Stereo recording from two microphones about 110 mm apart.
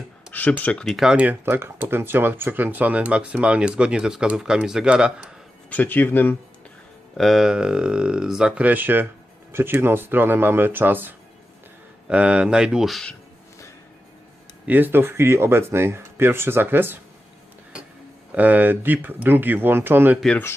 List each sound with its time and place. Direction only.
0.3 s speech: 15° left (ahead or behind)
0.9 s speech: 10° right (ahead or behind)
5.7 s speech: 15° left (ahead or behind)
7.2 s speech: centre (ahead or behind)
14.7 s speech: 15° right (ahead or behind)
18.3 s speech: 15° right (ahead or behind)